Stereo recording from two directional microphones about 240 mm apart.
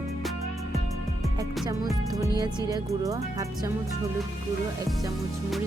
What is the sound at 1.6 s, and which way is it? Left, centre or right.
Speech, centre.